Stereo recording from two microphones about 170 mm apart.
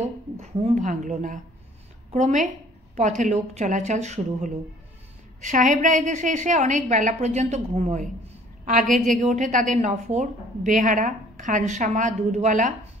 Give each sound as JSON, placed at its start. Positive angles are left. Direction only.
{"t": 0.0, "sound": "a woman's voice", "side_deg": -40}